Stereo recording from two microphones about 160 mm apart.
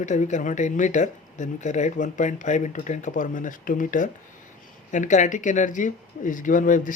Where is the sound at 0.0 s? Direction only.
50° left (ahead or behind).